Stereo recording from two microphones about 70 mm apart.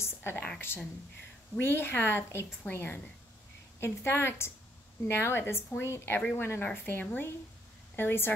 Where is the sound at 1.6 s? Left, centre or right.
Left.